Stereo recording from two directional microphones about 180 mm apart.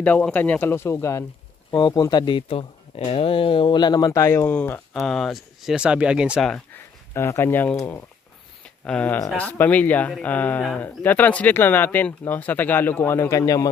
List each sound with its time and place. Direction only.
0.0 s speech: 10° left (ahead or behind)
8.6 s a sound: 5° left (ahead or behind)
9.3 s speech: 10° left (ahead or behind)